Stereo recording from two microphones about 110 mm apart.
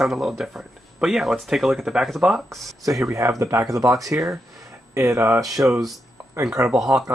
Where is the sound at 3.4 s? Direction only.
30° right (ahead or behind).